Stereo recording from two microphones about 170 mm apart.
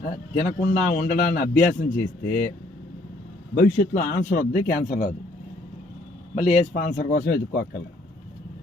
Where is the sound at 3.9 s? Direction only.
50° left (ahead or behind).